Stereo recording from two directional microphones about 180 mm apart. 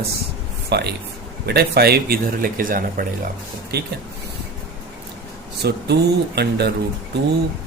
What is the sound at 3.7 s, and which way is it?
Speech, 60° right (ahead or behind).